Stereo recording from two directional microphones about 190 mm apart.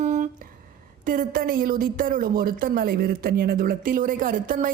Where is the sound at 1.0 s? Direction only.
45° right (ahead or behind).